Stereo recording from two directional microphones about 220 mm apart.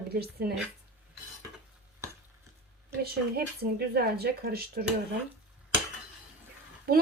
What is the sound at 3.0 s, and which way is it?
A woman's voice, 45° right (ahead or behind).